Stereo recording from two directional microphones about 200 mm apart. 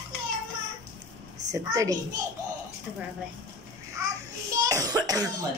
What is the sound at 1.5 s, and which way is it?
Speech, 15° right (ahead or behind).